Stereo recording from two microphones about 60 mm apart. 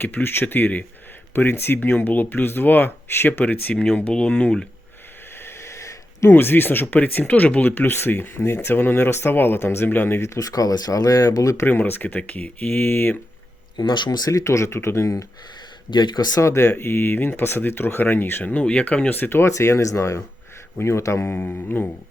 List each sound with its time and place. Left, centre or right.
0.0 s speech: left
5.5 s a sound: left
6.3 s speech: left
10.2 s speech: left
11.6 s speech: left
14.2 s speech: left
16.4 s speech: left
18.5 s speech: centre; by 19.5 s left
19.5 s speech: left
21.2 s speech: left